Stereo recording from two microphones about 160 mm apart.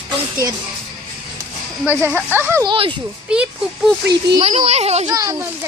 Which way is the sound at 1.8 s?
15° right (ahead or behind).